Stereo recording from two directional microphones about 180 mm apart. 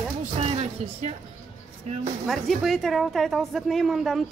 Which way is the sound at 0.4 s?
35° right (ahead or behind).